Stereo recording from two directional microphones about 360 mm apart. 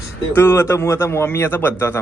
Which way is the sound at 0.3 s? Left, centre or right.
Centre.